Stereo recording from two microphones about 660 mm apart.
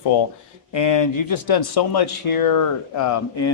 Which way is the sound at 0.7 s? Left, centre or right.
Left.